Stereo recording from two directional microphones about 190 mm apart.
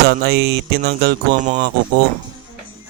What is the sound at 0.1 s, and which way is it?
Music, 55° right (ahead or behind).